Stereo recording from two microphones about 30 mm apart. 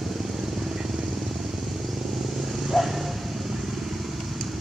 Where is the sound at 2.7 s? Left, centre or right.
Centre.